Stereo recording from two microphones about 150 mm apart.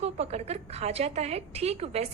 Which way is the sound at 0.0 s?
45° right (ahead or behind).